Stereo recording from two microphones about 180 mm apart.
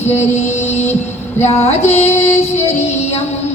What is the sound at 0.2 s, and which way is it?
Music, 40° left (ahead or behind).